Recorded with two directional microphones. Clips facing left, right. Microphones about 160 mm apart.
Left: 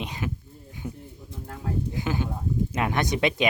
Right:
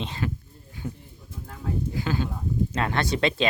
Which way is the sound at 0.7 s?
15° left (ahead or behind).